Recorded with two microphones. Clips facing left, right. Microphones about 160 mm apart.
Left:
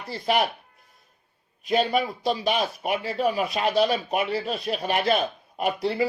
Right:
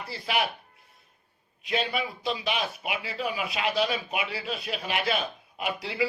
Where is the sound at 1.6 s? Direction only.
40° left (ahead or behind).